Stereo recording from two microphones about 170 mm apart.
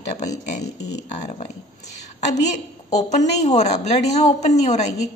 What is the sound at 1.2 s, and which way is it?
A woman's voice, 40° left (ahead or behind).